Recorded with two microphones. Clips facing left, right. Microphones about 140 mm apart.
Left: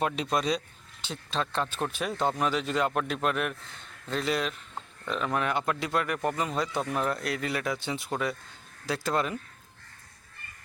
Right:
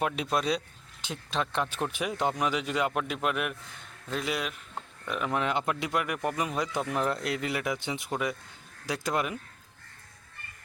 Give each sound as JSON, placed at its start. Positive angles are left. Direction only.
{"t": 0.0, "sound": "a man's voice", "side_deg": -5}